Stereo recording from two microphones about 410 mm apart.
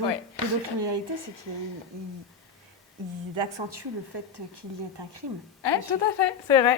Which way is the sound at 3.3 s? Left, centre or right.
Right.